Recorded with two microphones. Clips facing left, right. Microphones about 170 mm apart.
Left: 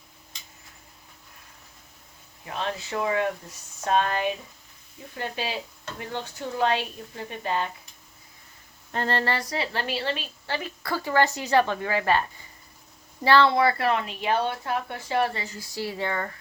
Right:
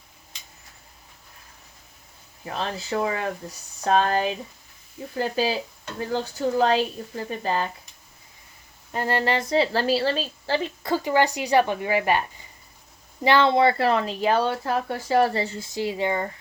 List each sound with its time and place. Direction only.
2.5 s speech: 35° right (ahead or behind)
8.9 s a woman's voice: 10° right (ahead or behind)
13.2 s speech: 20° right (ahead or behind)